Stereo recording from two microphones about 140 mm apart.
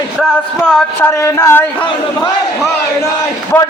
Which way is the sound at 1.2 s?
20° left (ahead or behind).